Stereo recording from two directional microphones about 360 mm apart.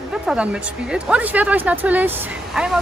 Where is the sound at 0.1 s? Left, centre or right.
Centre.